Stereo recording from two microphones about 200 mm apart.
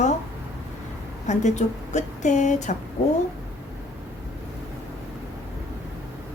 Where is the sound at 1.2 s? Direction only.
35° left (ahead or behind).